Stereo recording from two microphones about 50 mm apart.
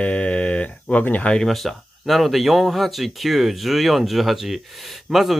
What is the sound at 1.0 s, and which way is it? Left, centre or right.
Speech, left.